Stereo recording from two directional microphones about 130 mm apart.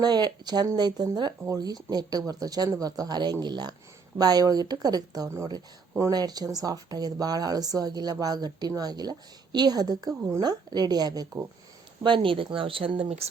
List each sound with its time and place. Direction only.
0.0 s speech: 35° right (ahead or behind); by 13.2 s 50° right (ahead or behind)